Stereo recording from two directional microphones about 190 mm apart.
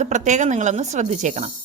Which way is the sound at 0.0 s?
40° right (ahead or behind).